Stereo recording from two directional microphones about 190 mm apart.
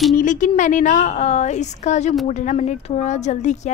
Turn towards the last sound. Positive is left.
turn(degrees=40)  # may be behind; listen again after turning